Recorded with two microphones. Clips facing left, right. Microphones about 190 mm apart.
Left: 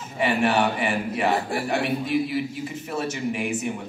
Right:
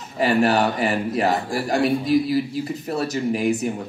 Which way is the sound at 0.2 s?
35° right (ahead or behind).